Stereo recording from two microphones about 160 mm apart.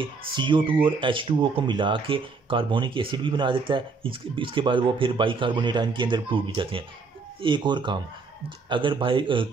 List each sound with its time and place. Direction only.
0.4 s speech: 30° right (ahead or behind)